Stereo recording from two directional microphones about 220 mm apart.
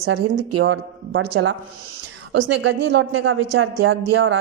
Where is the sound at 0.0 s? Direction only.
60° right (ahead or behind).